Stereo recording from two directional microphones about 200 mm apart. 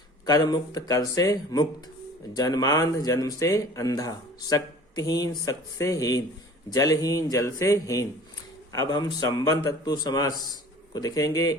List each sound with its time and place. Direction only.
0.3 s a man's voice: 20° left (ahead or behind)